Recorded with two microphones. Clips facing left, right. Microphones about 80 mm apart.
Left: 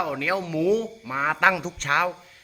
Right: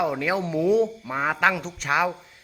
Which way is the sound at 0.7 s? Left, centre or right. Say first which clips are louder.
Right 3 dB; centre.